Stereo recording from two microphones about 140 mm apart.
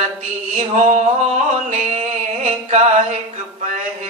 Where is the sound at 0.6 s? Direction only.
60° right (ahead or behind).